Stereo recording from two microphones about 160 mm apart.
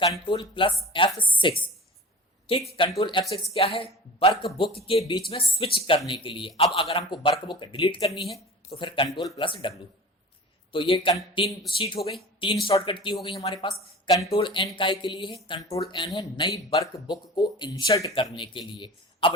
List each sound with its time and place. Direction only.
0.0 s speech: 25° left (ahead or behind)